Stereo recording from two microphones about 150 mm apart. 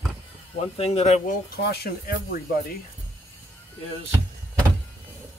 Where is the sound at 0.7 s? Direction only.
40° left (ahead or behind).